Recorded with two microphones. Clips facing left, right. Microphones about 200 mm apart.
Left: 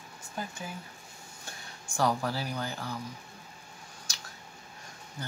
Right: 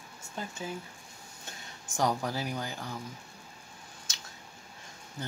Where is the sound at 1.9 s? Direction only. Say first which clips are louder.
Left 1 dB; 15° right (ahead or behind).